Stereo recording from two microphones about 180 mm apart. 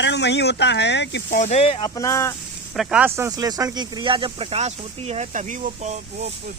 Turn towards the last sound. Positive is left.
turn(degrees=-40)  # may be behind; listen again after turning